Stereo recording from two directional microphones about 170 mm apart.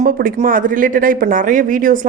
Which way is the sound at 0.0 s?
60° right (ahead or behind).